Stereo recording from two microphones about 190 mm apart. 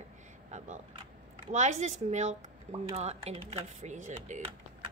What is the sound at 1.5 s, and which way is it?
Speech, 35° right (ahead or behind).